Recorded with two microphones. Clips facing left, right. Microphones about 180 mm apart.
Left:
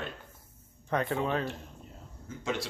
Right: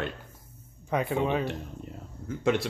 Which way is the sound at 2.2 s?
60° right (ahead or behind).